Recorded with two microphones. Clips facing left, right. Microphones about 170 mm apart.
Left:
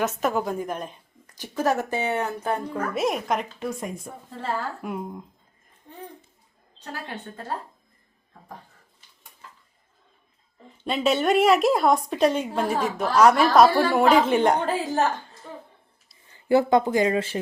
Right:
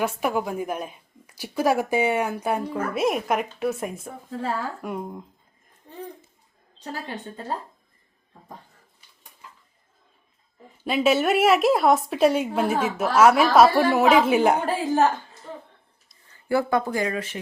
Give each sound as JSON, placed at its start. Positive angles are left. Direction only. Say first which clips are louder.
{"t": 0.0, "sound": "a woman's voice", "louder": "even", "side_deg": -10}
{"t": 10.8, "sound": "a woman's voice", "louder": "right 1 dB", "side_deg": -5}
{"t": 16.3, "sound": "speech", "louder": "left 4 dB", "side_deg": 20}